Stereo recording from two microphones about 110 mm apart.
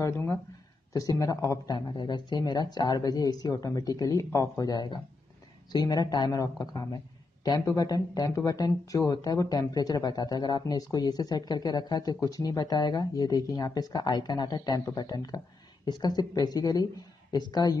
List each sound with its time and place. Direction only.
0.9 s speech: 30° left (ahead or behind)